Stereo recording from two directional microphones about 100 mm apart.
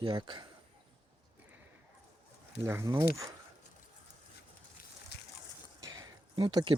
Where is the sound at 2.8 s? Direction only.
35° right (ahead or behind).